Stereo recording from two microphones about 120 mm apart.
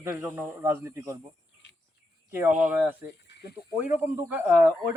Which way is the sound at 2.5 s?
90° right.